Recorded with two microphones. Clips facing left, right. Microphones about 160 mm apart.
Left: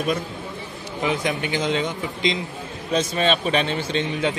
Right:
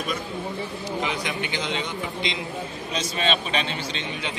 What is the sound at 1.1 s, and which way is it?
Speech, 40° left (ahead or behind).